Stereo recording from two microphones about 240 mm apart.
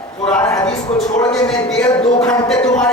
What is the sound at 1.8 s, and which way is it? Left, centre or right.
Speech, centre.